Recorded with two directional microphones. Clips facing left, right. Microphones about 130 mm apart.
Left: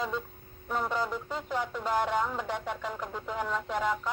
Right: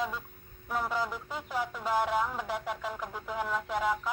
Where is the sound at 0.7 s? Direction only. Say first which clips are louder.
Left 1 dB; 10° right (ahead or behind).